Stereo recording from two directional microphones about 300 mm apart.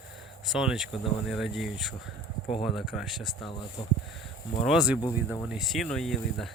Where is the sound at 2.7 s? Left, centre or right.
Centre.